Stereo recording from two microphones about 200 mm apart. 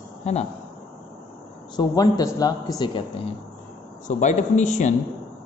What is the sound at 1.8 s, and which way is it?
A man's voice, 20° left (ahead or behind).